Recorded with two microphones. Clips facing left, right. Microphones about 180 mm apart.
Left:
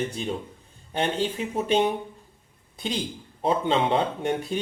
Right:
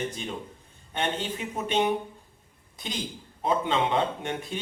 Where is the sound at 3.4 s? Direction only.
30° left (ahead or behind).